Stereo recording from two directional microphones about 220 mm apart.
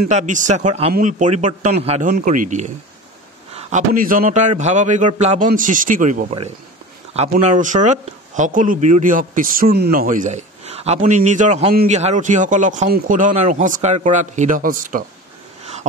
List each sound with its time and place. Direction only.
0.1 s speech: 35° right (ahead or behind)
11.7 s speech: 40° right (ahead or behind)